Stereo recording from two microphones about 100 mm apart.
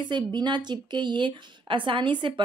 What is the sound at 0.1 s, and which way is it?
A woman's voice, 45° right (ahead or behind).